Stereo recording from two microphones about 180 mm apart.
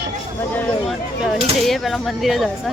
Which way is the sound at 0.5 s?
10° left (ahead or behind).